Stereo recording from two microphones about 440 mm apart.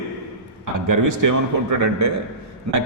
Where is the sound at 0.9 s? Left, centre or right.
Right.